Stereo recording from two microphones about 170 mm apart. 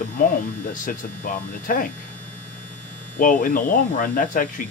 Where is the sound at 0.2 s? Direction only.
55° left (ahead or behind).